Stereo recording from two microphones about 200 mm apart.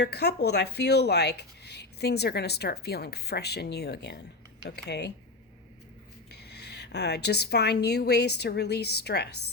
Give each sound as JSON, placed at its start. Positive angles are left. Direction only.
{"t": 0.0, "sound": "speech", "side_deg": 55}
{"t": 6.3, "sound": "speech", "side_deg": 55}